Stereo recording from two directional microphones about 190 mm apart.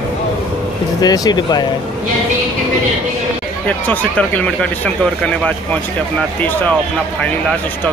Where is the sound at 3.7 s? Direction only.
10° left (ahead or behind).